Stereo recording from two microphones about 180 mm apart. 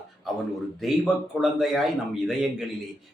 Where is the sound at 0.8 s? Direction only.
Centre (ahead or behind).